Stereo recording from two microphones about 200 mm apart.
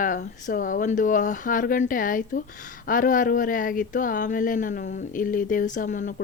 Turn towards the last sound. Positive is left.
turn(degrees=40)  # may be behind; listen again after turning